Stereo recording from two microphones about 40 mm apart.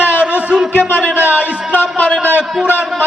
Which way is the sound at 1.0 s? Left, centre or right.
Right.